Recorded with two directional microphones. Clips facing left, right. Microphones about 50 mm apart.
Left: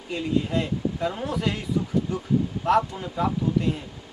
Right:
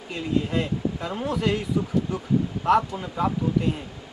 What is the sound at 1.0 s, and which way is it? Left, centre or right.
Speech, centre.